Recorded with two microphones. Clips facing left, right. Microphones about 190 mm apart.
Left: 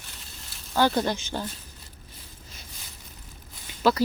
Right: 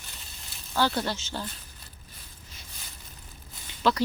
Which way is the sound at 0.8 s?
15° left (ahead or behind).